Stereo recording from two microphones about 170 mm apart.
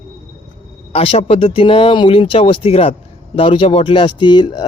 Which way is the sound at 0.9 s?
35° left (ahead or behind).